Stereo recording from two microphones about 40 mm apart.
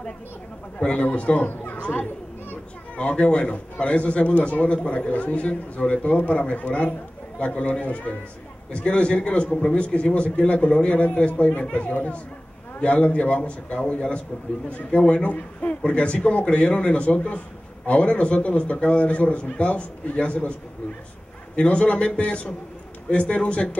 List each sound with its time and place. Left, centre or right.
0.7 s a man's voice: left
1.5 s chatter: left
3.0 s a man's voice: left
21.5 s a man's voice: left